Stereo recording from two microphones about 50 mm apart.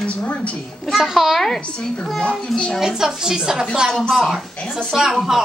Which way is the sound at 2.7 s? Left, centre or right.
Centre.